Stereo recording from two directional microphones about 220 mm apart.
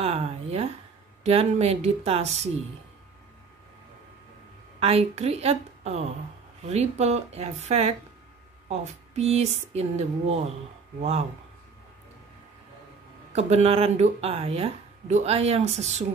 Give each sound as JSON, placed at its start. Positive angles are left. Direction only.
{"t": 0.0, "sound": "speech", "side_deg": -25}
{"t": 4.7, "sound": "speech", "side_deg": -25}
{"t": 13.3, "sound": "speech", "side_deg": -30}